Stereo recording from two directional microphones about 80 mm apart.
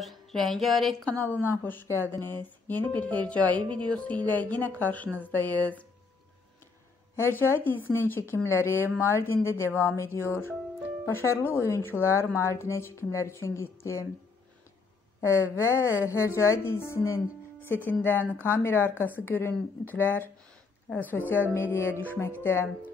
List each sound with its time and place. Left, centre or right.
0.0 s speech: centre
1.2 s speech: left
7.2 s a woman's voice: left
15.1 s a woman's voice: left